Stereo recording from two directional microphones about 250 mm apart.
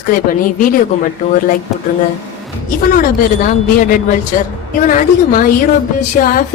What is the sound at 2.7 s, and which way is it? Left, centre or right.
A woman's voice, left.